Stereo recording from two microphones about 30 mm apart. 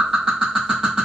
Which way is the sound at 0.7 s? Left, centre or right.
Centre.